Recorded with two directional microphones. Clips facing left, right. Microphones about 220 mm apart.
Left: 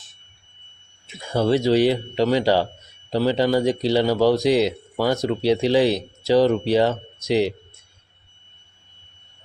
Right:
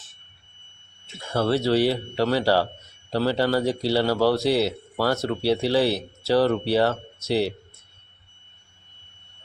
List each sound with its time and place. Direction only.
1.0 s a man's voice: 15° left (ahead or behind)